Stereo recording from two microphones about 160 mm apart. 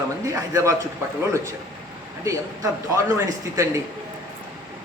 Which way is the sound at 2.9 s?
20° right (ahead or behind).